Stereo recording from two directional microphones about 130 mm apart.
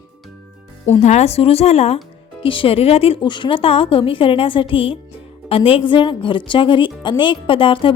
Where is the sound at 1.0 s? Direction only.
55° left (ahead or behind).